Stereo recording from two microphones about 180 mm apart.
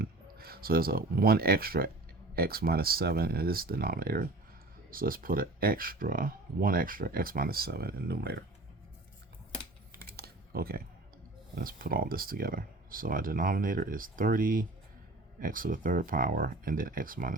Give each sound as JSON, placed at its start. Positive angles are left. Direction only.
{"t": 0.0, "sound": "speech", "side_deg": -55}
{"t": 10.1, "sound": "a sound", "side_deg": -60}
{"t": 11.5, "sound": "speech", "side_deg": -55}